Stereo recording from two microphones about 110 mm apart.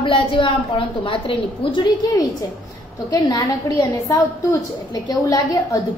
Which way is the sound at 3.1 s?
35° left (ahead or behind).